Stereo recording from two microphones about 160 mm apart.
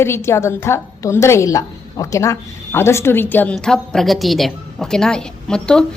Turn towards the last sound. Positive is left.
turn(degrees=5)  # may be behind; listen again after turning